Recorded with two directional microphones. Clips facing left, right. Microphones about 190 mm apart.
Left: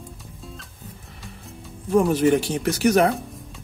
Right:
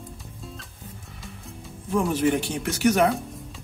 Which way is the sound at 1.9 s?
40° left (ahead or behind).